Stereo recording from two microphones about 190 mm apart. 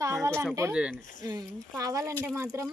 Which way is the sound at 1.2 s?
20° right (ahead or behind).